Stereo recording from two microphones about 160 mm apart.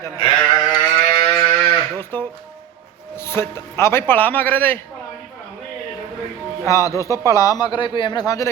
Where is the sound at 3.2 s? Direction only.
15° left (ahead or behind).